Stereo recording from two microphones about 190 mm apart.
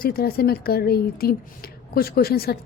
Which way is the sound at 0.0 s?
55° left (ahead or behind).